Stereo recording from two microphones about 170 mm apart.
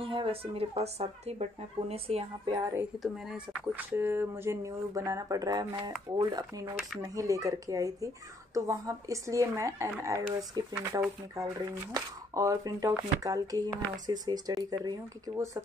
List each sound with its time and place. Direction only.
0.0 s speech: 30° right (ahead or behind)
3.0 s speech: 5° right (ahead or behind)
10.7 s speech: 5° right (ahead or behind)
11.9 s speech: 20° right (ahead or behind)